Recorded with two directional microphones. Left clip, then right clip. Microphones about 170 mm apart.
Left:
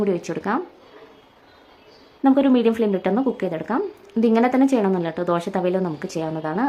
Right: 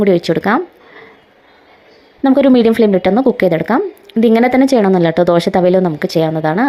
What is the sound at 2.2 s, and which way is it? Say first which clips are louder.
Speech: right 7 dB; 40° right (ahead or behind).